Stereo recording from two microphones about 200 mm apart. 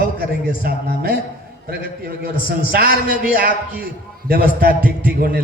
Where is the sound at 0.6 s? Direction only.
50° right (ahead or behind).